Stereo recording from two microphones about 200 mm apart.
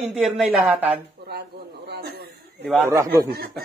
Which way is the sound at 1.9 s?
55° right (ahead or behind).